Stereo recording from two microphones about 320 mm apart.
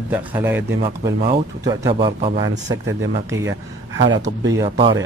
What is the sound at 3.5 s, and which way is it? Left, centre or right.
Speech, right.